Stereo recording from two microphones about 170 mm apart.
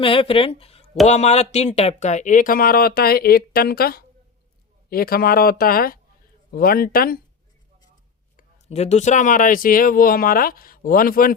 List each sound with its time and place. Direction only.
0.0 s speech: 30° left (ahead or behind); by 7.2 s 60° left (ahead or behind)
8.6 s speech: 40° left (ahead or behind); by 11.3 s 55° left (ahead or behind)